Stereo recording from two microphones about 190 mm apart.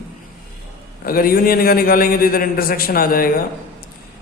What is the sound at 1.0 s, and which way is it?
Mantra, 50° left (ahead or behind).